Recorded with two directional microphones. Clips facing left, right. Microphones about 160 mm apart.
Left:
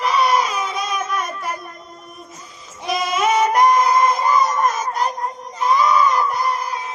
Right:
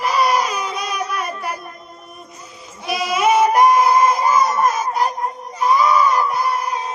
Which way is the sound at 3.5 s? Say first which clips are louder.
Right 2 dB; 5° right (ahead or behind).